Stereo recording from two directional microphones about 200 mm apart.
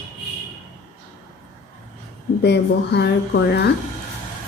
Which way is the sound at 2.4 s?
55° left (ahead or behind).